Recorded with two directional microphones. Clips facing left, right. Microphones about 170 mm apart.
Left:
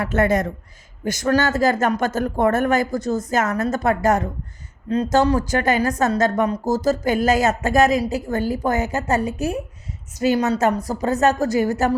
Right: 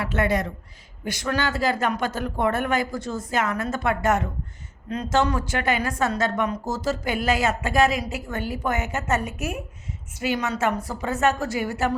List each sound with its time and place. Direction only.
0.0 s a woman's voice: 45° left (ahead or behind)